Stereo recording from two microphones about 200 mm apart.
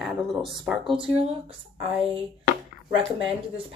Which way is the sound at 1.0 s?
30° right (ahead or behind).